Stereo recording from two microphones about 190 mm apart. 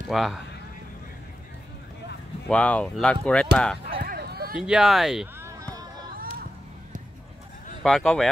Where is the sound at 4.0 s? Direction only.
55° right (ahead or behind).